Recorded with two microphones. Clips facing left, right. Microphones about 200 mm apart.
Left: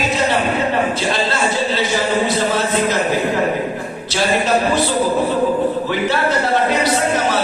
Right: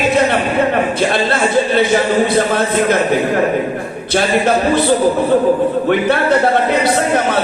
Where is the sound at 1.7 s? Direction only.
55° right (ahead or behind).